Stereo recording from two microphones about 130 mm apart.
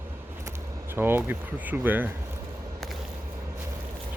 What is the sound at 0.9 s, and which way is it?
Speech, 15° right (ahead or behind).